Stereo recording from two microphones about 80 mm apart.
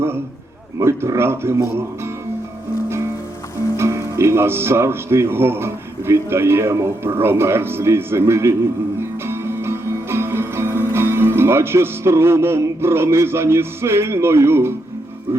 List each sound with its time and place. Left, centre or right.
0.8 s speech: right
3.8 s speech: right
9.0 s music: right
15.3 s speech: right